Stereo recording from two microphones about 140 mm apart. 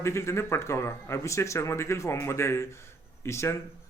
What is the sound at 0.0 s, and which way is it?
Speech, 20° left (ahead or behind).